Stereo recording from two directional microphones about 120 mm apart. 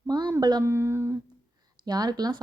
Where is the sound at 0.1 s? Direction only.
35° right (ahead or behind).